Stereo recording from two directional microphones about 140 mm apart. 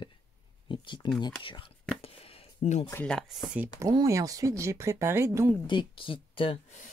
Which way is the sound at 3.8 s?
25° right (ahead or behind).